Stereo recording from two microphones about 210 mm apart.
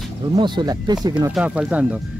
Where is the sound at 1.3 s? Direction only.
5° right (ahead or behind).